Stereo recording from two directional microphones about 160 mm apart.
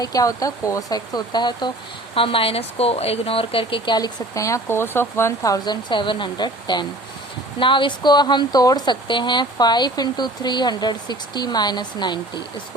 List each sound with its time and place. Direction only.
0.0 s speech: 20° left (ahead or behind)